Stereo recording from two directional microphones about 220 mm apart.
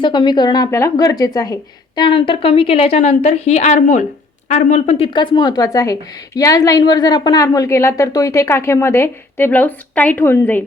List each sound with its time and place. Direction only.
0.0 s a woman's voice: 20° left (ahead or behind)